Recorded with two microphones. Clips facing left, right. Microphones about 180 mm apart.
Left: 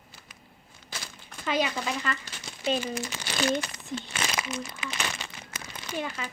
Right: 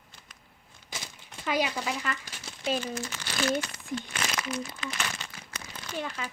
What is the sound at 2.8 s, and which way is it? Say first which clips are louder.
Speech: left 2 dB; 15° left (ahead or behind).